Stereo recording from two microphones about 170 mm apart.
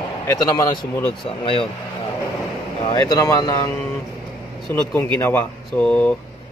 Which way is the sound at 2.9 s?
20° left (ahead or behind).